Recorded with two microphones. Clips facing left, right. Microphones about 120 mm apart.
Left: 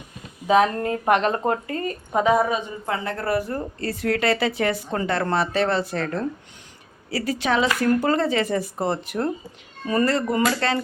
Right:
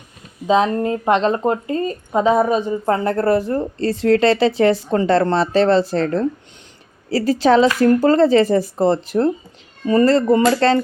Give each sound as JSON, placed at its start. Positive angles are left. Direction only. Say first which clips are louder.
{"t": 0.4, "sound": "speech", "louder": "right 3 dB", "side_deg": -25}